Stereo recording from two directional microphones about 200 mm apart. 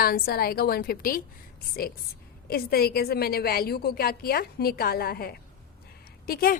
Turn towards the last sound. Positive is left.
turn(degrees=50)  # may be behind; listen again after turning